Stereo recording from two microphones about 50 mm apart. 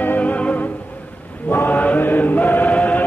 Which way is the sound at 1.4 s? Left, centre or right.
Left.